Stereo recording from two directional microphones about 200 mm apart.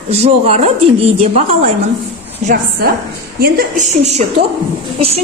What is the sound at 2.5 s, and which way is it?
A woman's voice, 45° right (ahead or behind).